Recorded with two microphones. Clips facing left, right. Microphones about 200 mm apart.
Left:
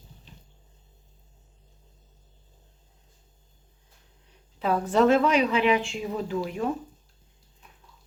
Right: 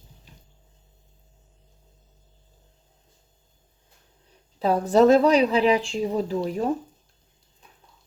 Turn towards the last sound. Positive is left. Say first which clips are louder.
# right 3 dB
turn(degrees=-35)  # may be behind; listen again after turning